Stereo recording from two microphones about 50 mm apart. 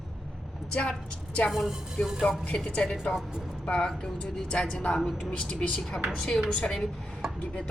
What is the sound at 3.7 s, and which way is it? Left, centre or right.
Speech, centre.